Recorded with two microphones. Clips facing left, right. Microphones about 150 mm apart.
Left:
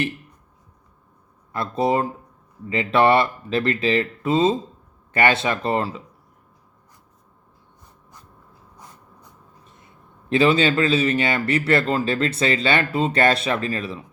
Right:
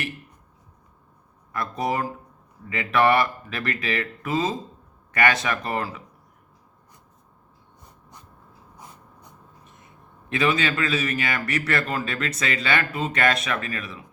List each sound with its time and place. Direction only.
1.5 s a man's voice: 25° left (ahead or behind)
10.2 s a man's voice: 30° left (ahead or behind)